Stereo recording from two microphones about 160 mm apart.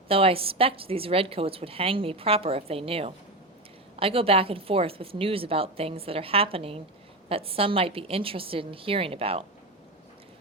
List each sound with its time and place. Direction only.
0.1 s a woman's voice: 35° right (ahead or behind)